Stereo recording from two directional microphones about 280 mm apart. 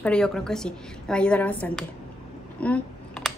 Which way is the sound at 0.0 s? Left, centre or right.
Centre.